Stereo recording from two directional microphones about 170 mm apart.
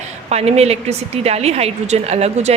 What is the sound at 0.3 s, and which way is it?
A woman's voice, 40° right (ahead or behind).